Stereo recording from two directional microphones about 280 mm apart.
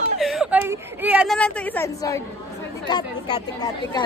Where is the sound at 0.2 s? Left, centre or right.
Centre.